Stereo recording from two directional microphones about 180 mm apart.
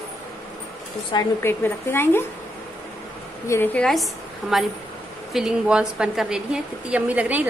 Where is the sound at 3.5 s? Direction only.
10° left (ahead or behind).